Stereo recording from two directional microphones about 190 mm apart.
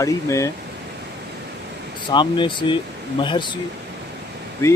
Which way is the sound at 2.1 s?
25° left (ahead or behind).